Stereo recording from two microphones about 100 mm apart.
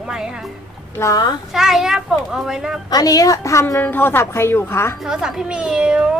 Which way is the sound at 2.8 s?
40° left (ahead or behind).